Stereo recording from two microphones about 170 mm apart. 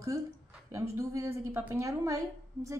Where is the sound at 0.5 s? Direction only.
15° right (ahead or behind).